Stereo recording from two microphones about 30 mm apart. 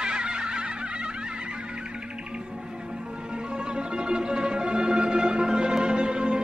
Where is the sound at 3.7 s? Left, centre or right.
Right.